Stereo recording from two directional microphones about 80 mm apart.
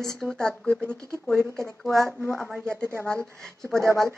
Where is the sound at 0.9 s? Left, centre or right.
Right.